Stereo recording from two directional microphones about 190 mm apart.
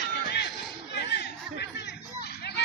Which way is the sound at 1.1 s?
60° left (ahead or behind).